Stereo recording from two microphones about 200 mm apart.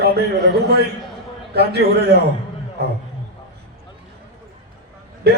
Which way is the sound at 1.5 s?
55° right (ahead or behind).